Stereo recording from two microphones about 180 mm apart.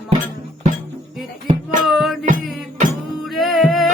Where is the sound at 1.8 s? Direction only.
Centre (ahead or behind).